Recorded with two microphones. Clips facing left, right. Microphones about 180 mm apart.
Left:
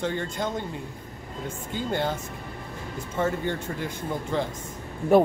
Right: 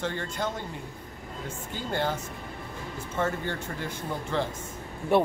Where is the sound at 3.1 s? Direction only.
15° left (ahead or behind).